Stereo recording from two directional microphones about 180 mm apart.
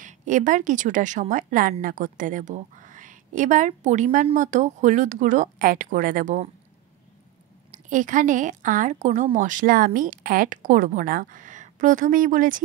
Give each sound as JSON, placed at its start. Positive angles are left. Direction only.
{"t": 0.0, "sound": "a woman's voice", "side_deg": -45}
{"t": 7.7, "sound": "a woman's voice", "side_deg": -45}